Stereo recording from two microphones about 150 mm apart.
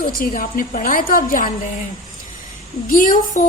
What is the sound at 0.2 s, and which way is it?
A woman's voice, 65° left (ahead or behind).